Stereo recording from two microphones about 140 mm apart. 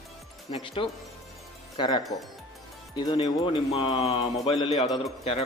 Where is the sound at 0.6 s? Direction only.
40° left (ahead or behind).